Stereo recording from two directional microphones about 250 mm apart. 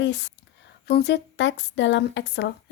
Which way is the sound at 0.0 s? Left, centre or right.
Left.